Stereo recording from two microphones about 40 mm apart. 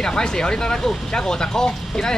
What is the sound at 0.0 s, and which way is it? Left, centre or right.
Speech, centre.